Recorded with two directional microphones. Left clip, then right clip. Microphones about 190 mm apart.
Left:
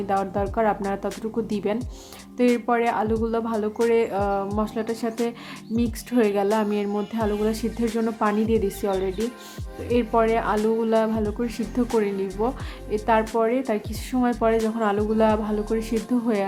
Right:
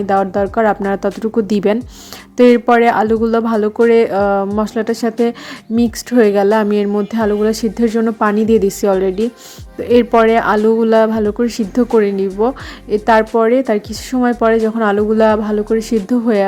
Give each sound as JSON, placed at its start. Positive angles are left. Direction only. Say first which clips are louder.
{"t": 0.1, "sound": "speech", "louder": "right 10 dB", "side_deg": -35}